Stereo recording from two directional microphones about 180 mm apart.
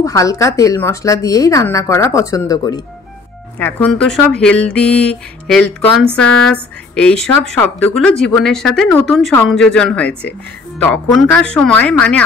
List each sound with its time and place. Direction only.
0.0 s a woman's voice: 20° left (ahead or behind)
3.5 s a woman's voice: 5° left (ahead or behind)